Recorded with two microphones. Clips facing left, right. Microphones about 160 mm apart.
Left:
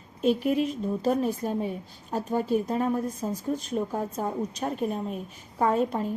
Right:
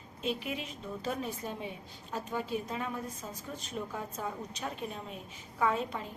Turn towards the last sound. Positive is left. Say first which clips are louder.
# left 7 dB
turn(degrees=50)  # may be behind; listen again after turning